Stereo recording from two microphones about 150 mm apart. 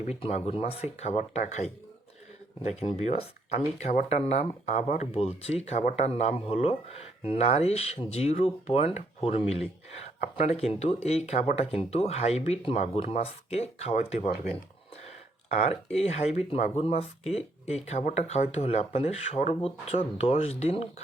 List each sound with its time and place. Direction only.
0.0 s speech: 45° left (ahead or behind)
15.9 s speech: 45° left (ahead or behind)